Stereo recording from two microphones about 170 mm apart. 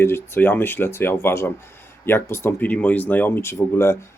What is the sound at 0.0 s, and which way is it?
Speech, 15° left (ahead or behind).